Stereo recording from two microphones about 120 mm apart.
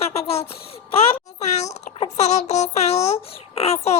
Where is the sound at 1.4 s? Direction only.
70° left (ahead or behind).